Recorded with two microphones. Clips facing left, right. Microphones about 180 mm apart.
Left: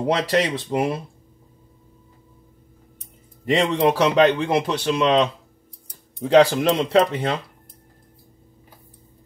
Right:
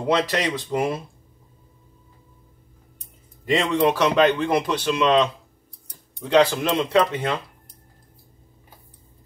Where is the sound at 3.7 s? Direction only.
35° left (ahead or behind).